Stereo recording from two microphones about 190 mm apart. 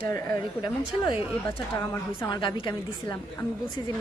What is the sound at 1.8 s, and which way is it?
A woman's voice, 20° left (ahead or behind).